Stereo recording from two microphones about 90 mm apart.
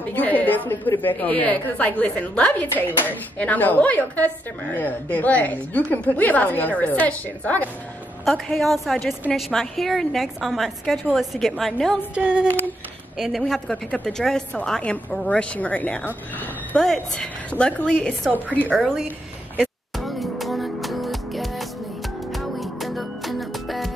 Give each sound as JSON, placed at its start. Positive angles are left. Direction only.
{"t": 0.1, "sound": "a woman's voice", "side_deg": 20}
{"t": 8.3, "sound": "a woman's voice", "side_deg": 0}
{"t": 12.2, "sound": "female singing", "side_deg": -10}
{"t": 12.4, "sound": "a woman's voice", "side_deg": 20}
{"t": 13.2, "sound": "a woman's voice", "side_deg": 5}
{"t": 16.7, "sound": "a woman's voice", "side_deg": 5}
{"t": 19.6, "sound": "music", "side_deg": 0}